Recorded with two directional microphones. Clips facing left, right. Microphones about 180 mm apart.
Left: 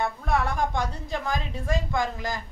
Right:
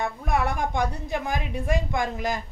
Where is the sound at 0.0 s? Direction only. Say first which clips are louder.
Even; 15° right (ahead or behind).